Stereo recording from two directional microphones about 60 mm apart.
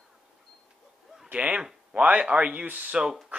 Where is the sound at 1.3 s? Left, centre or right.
Centre.